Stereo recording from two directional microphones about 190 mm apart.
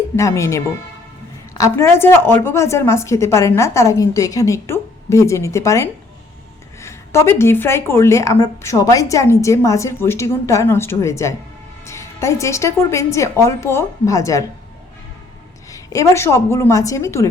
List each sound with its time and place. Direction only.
0.2 s speech: 15° left (ahead or behind)
15.7 s speech: 15° left (ahead or behind)